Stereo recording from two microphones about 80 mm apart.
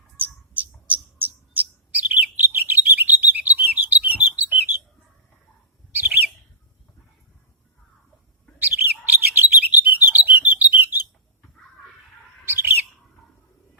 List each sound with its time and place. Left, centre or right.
0.2 s bird: centre
5.9 s bird: right
8.5 s bird: right
12.5 s bird: right